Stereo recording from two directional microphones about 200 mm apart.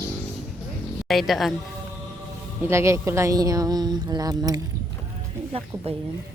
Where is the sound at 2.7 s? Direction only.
15° right (ahead or behind).